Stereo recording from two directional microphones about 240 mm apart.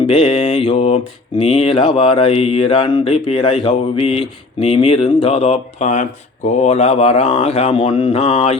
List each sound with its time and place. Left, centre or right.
0.0 s mantra: left